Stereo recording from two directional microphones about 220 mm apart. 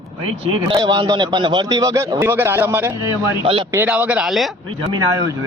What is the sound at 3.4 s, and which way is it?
Speech, 25° right (ahead or behind).